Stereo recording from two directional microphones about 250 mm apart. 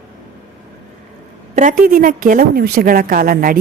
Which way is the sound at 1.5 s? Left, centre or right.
Right.